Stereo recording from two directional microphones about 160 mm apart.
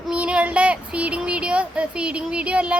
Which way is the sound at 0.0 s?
5° right (ahead or behind).